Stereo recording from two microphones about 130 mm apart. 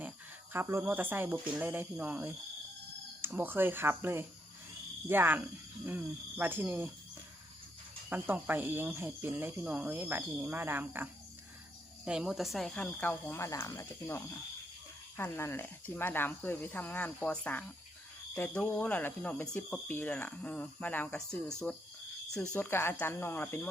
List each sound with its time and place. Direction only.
0.5 s speech: 15° right (ahead or behind)
8.1 s speech: 15° right (ahead or behind)
12.0 s speech: 5° right (ahead or behind); by 23.6 s 15° left (ahead or behind)